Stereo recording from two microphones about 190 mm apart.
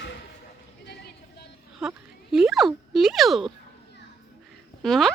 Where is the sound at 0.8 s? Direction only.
60° left (ahead or behind).